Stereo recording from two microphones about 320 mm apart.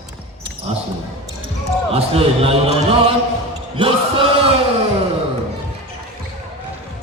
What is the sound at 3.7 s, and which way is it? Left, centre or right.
Chant, centre.